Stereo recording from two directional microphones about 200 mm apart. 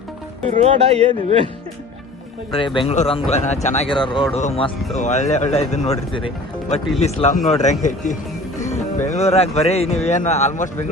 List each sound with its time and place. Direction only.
0.4 s speech: 30° right (ahead or behind)
2.5 s a man's voice: 25° left (ahead or behind)